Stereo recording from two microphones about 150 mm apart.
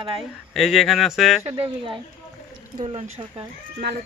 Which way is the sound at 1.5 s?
40° right (ahead or behind).